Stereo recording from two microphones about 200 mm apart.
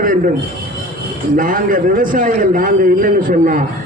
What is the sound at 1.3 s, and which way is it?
A man's voice, 45° right (ahead or behind).